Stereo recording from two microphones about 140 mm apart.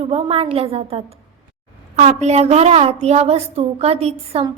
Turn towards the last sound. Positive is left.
turn(degrees=-45)  # may be behind; listen again after turning